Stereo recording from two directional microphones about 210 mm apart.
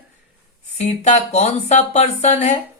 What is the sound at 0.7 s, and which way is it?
Speech, 35° left (ahead or behind).